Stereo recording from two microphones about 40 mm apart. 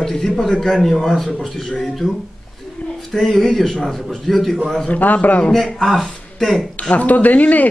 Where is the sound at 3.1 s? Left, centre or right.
Centre.